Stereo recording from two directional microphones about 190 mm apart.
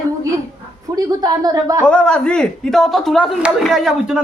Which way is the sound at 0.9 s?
20° right (ahead or behind).